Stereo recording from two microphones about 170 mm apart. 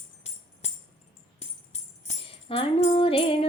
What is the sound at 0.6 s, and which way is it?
Music, 40° left (ahead or behind).